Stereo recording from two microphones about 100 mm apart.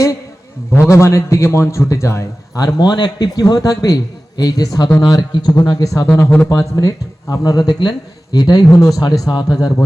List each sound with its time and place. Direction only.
0.7 s a man's voice: 25° left (ahead or behind)
6.1 s speech: 20° left (ahead or behind)
6.5 s a man's voice: 35° left (ahead or behind)